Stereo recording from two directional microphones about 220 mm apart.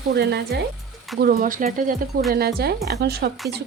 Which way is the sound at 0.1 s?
50° right (ahead or behind).